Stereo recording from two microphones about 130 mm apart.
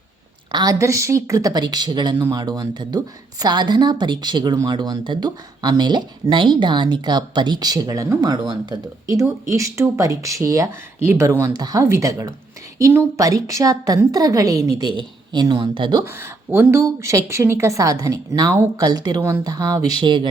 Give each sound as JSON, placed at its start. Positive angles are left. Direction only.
{"t": 0.5, "sound": "a woman's voice", "side_deg": -30}
{"t": 16.0, "sound": "a woman's voice", "side_deg": -20}
{"t": 20.0, "sound": "a woman's voice", "side_deg": -40}